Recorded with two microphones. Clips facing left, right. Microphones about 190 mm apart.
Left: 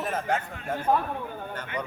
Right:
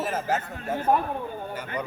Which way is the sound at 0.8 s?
20° right (ahead or behind).